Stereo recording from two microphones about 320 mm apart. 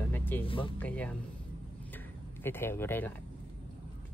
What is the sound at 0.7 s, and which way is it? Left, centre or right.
Speech, centre.